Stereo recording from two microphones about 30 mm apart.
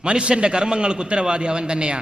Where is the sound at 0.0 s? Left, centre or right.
Right.